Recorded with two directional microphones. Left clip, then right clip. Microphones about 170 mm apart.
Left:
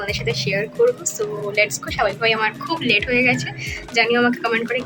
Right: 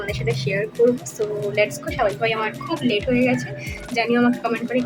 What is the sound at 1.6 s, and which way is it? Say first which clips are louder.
A woman's voice: left 1 dB; 25° right (ahead or behind).